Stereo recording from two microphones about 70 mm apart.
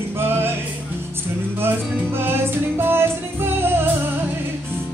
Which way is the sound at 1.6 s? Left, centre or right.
Right.